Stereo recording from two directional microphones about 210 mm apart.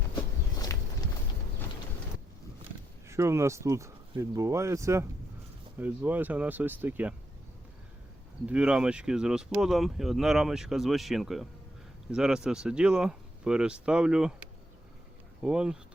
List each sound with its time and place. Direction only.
0.6 s walk: 15° left (ahead or behind)
3.1 s speech: 15° right (ahead or behind)
8.4 s speech: 5° right (ahead or behind)
15.4 s speech: 5° right (ahead or behind)